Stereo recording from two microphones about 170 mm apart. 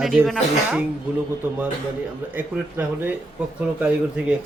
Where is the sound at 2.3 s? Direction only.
10° right (ahead or behind).